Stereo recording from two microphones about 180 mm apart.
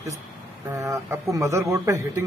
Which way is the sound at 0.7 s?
15° right (ahead or behind).